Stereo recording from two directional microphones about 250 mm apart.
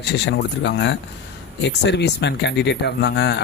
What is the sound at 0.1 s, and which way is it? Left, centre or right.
Speech, left.